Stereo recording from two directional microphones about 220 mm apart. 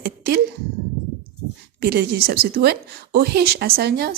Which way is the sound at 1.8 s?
45° right (ahead or behind).